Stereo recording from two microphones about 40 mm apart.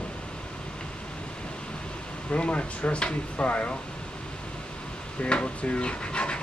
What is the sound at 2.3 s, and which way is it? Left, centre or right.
Speech, left.